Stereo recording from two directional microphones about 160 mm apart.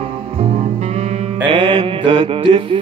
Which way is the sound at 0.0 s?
35° right (ahead or behind).